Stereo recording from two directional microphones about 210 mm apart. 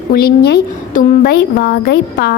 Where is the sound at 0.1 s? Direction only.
45° left (ahead or behind).